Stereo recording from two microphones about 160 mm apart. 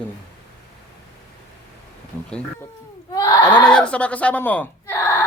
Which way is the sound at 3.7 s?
5° left (ahead or behind).